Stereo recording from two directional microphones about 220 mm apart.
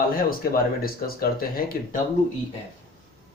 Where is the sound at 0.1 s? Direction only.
40° left (ahead or behind).